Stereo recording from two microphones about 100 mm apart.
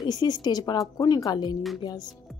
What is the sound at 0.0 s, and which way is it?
Speech, 45° left (ahead or behind).